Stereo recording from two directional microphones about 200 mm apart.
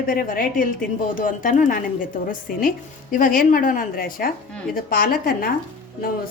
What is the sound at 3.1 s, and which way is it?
A woman's voice, 45° left (ahead or behind).